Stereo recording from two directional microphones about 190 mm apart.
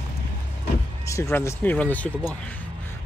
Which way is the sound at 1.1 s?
15° left (ahead or behind).